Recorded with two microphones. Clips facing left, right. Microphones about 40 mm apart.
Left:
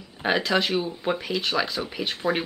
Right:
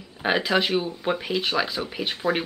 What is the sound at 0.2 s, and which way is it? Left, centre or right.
Speech, centre.